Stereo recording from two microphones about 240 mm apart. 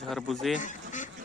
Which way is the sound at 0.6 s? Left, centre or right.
Left.